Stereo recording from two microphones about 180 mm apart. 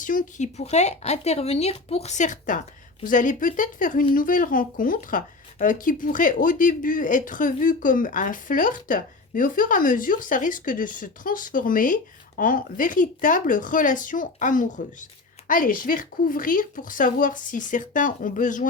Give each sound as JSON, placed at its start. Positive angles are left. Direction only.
{"t": 0.0, "sound": "speech", "side_deg": 45}